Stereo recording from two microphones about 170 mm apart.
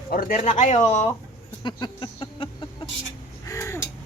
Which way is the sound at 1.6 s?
30° left (ahead or behind).